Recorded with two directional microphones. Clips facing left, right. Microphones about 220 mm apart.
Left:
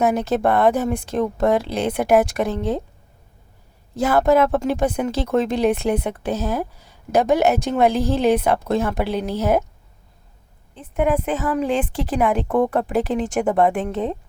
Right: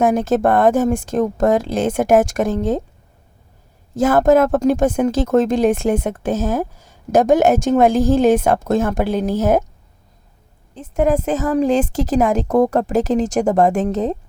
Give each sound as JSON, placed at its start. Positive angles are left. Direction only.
{"t": 0.0, "sound": "a woman's voice", "side_deg": -50}
{"t": 3.9, "sound": "a woman's voice", "side_deg": -50}
{"t": 10.8, "sound": "a woman's voice", "side_deg": -40}